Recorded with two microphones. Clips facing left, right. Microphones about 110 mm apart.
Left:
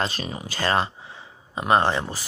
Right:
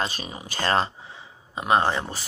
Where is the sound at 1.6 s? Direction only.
30° left (ahead or behind).